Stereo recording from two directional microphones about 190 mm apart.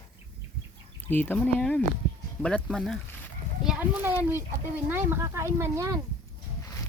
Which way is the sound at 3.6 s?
10° right (ahead or behind).